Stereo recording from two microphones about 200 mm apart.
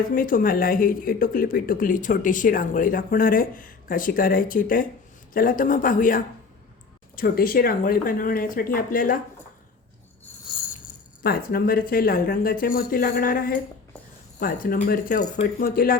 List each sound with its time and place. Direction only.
0.0 s speech: 45° left (ahead or behind)
11.2 s speech: 50° left (ahead or behind)